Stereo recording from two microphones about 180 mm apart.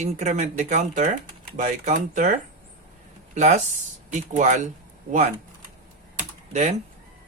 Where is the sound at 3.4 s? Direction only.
40° right (ahead or behind).